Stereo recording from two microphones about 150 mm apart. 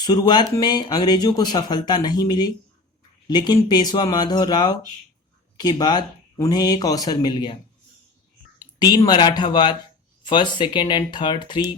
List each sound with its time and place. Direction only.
0.0 s speech: 25° left (ahead or behind)
8.8 s speech: 25° left (ahead or behind)